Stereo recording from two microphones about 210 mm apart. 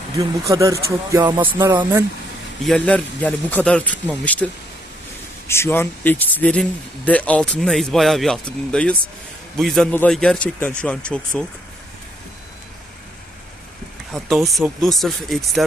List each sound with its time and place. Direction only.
0.4 s speech: 15° right (ahead or behind)
2.6 s speech: 5° left (ahead or behind)
5.5 s speech: 10° left (ahead or behind)
14.1 s speech: centre (ahead or behind)